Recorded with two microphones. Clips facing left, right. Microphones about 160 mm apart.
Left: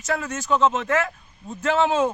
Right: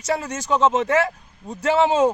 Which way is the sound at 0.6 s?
30° right (ahead or behind).